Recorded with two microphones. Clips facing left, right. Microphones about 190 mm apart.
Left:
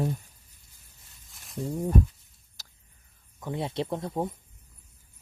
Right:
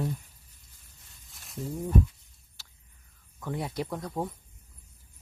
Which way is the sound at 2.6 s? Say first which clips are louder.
Left 2 dB; 40° left (ahead or behind).